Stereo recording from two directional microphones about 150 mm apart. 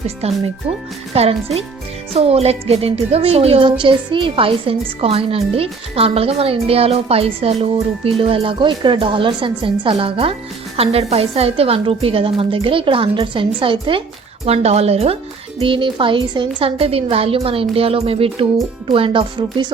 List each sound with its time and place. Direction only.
1.1 s a woman's voice: 40° right (ahead or behind)